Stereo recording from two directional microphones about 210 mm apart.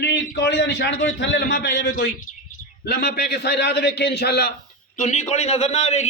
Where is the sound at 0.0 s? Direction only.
55° left (ahead or behind).